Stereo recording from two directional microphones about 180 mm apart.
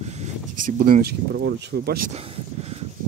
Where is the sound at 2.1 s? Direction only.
35° right (ahead or behind).